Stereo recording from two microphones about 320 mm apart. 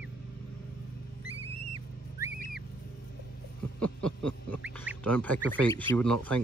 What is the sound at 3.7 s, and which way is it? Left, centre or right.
Duck, centre.